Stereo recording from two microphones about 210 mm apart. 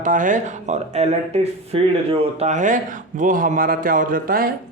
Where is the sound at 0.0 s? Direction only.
40° right (ahead or behind).